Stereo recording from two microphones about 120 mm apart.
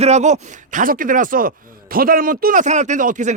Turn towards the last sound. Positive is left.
turn(degrees=-90)